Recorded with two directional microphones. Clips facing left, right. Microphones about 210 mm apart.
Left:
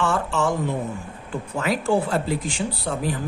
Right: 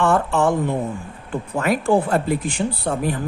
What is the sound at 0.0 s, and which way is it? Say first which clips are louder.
Speech: right 5 dB; 55° right (ahead or behind).